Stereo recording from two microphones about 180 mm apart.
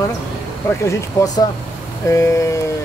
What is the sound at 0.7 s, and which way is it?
Speech, 20° left (ahead or behind).